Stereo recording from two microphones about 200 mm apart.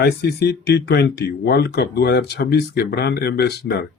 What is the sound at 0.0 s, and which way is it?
Speech, 55° left (ahead or behind).